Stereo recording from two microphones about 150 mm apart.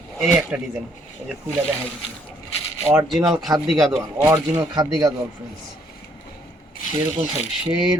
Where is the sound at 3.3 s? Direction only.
Centre (ahead or behind).